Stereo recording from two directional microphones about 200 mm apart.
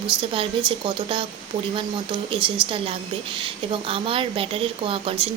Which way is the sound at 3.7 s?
25° right (ahead or behind).